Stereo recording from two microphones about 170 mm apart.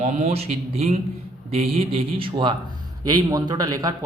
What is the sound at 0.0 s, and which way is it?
Speech, 40° right (ahead or behind).